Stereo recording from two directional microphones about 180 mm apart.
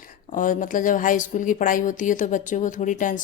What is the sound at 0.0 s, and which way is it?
A woman's voice, 50° left (ahead or behind).